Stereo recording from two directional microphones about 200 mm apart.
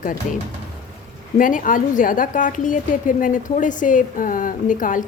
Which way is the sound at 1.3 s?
40° left (ahead or behind).